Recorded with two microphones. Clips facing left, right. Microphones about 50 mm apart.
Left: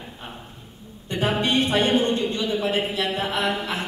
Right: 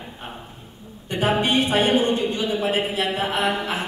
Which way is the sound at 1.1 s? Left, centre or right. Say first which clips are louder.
Right 2 dB; centre.